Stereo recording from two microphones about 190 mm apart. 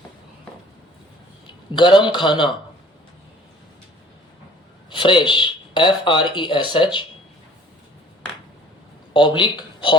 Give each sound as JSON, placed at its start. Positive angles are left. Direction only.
{"t": 1.5, "sound": "a man's voice", "side_deg": 25}
{"t": 4.9, "sound": "speech", "side_deg": 25}
{"t": 9.1, "sound": "a man's voice", "side_deg": 25}